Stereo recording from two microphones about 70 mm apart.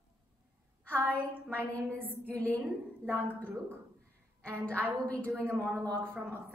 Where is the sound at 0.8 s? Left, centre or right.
Centre.